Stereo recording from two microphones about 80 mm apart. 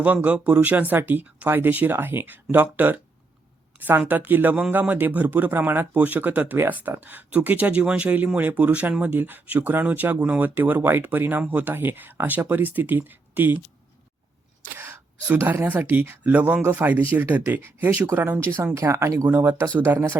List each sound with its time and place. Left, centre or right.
0.0 s speech: centre
14.8 s a sound: right
15.4 s speech: right